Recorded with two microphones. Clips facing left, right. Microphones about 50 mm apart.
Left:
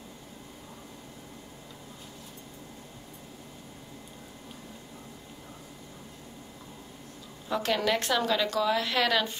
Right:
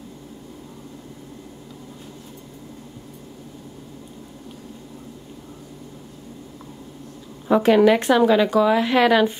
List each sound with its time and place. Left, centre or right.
7.4 s a woman's voice: right